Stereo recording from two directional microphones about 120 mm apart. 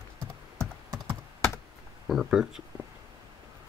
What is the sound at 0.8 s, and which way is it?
Computer keyboard, 35° right (ahead or behind).